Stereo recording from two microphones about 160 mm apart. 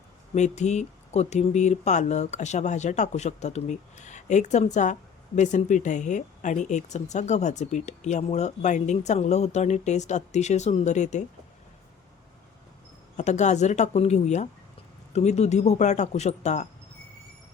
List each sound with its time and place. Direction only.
0.3 s speech: 45° left (ahead or behind)
13.1 s speech: 45° left (ahead or behind)